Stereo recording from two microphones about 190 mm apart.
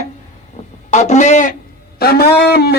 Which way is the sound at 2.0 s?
55° left (ahead or behind).